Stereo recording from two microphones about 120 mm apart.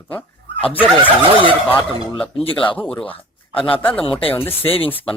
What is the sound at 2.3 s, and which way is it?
Speech, 50° left (ahead or behind).